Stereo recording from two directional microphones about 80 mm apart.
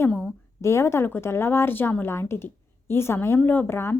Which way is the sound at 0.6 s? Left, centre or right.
Left.